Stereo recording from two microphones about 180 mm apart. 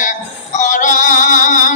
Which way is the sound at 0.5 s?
45° left (ahead or behind).